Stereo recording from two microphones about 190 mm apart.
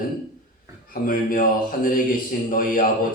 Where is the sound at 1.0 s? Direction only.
50° left (ahead or behind).